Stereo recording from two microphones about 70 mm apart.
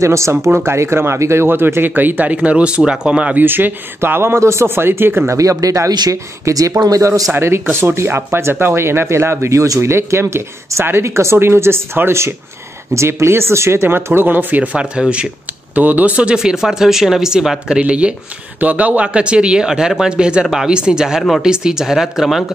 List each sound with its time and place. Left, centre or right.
0.0 s speech: right; by 3.3 s centre
3.3 s speech: right
5.3 s speech: right
7.3 s speech: right; by 15.2 s centre
15.7 s speech: right
21.2 s speech: centre